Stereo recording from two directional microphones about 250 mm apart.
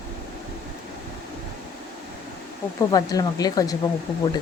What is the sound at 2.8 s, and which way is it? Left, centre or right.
Speech, centre.